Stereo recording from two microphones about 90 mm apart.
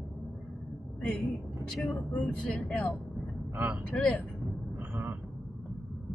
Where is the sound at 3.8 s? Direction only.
10° left (ahead or behind).